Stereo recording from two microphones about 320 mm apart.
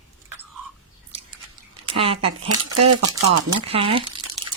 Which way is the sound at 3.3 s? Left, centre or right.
Centre.